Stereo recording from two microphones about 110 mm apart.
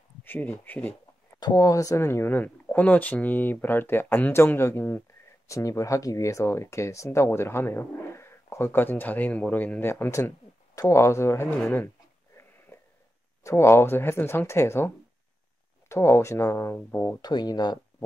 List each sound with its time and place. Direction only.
0.2 s speech: 20° left (ahead or behind)
1.4 s speech: 35° left (ahead or behind)
12.7 s a sound: 25° left (ahead or behind)
13.4 s speech: 25° left (ahead or behind)
15.9 s speech: 25° left (ahead or behind)
16.7 s speech: 15° left (ahead or behind)
17.2 s speech: 40° left (ahead or behind)